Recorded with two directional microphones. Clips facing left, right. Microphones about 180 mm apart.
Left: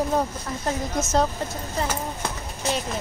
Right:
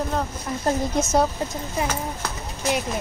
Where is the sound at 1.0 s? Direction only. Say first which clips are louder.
Right 1 dB; 15° right (ahead or behind).